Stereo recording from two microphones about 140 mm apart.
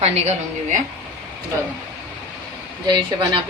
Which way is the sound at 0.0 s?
50° right (ahead or behind).